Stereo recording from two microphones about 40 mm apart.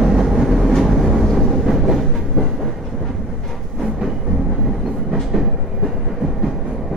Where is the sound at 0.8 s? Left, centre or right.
Centre.